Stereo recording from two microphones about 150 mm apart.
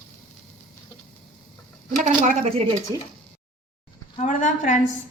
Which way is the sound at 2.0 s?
50° right (ahead or behind).